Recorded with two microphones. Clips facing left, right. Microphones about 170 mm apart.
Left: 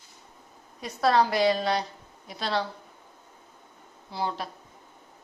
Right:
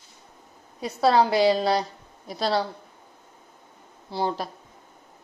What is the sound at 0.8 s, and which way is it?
A woman's voice, 30° right (ahead or behind).